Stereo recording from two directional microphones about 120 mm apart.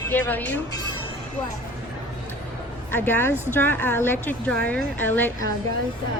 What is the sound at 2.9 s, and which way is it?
A woman's voice, 20° left (ahead or behind).